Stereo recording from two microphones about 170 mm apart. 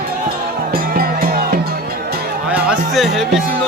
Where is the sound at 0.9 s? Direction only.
60° right (ahead or behind).